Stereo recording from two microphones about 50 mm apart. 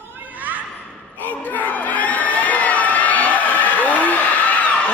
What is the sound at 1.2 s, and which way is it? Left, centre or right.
Crowd, left.